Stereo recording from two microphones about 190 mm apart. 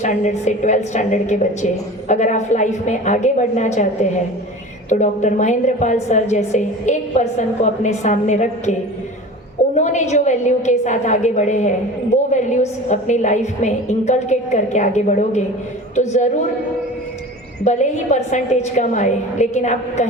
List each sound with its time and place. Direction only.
0.0 s a woman's voice: 40° left (ahead or behind)
9.7 s a woman's voice: 40° left (ahead or behind)
17.6 s a woman's voice: 40° left (ahead or behind)